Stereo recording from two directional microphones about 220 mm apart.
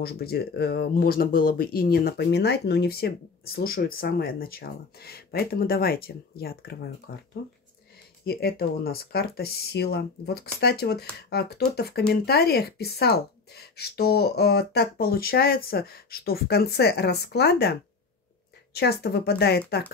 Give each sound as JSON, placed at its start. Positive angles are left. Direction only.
{"t": 0.0, "sound": "speech", "side_deg": 45}
{"t": 8.3, "sound": "speech", "side_deg": 45}